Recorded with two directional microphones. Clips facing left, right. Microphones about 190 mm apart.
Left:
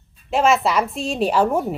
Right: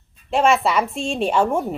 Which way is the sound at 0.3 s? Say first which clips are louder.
Even; centre (ahead or behind).